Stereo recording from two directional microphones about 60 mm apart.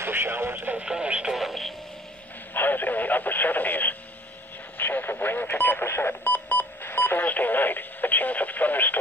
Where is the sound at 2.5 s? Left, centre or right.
Left.